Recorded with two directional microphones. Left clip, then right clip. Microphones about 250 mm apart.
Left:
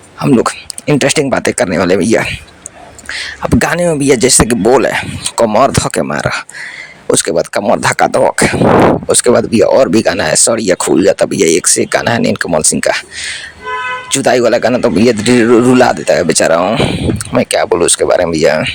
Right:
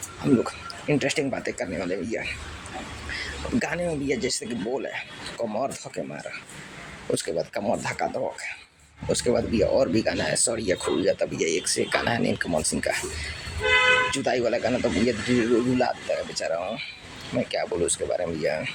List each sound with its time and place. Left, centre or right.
0.2 s speech: left
14.1 s speech: left